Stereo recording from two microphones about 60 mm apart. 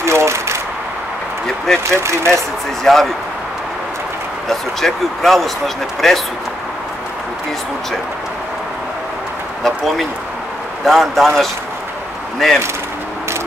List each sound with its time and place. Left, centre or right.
0.0 s a sound: right
1.9 s speech: right
2.8 s speech: centre
4.5 s speech: centre
9.6 s speech: centre